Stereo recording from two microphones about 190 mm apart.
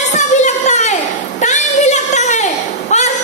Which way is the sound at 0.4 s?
40° left (ahead or behind).